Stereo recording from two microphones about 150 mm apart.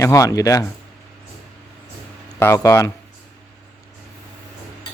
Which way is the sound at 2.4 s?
15° left (ahead or behind).